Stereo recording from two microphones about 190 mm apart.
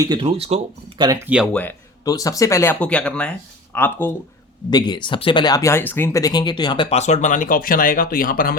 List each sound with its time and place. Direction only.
0.0 s speech: 25° right (ahead or behind)
1.5 s speech: 15° left (ahead or behind)
4.7 s speech: 25° left (ahead or behind); by 8.5 s 50° left (ahead or behind)